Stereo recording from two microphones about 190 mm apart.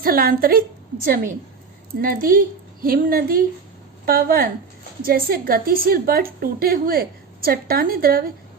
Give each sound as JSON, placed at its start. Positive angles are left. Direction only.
{"t": 0.0, "sound": "a woman's voice", "side_deg": -50}